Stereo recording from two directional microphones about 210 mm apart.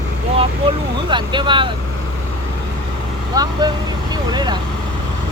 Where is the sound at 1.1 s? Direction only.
20° right (ahead or behind).